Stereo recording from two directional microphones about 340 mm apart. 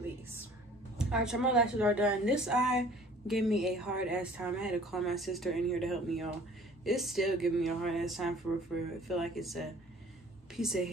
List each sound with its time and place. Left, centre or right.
0.9 s speech: centre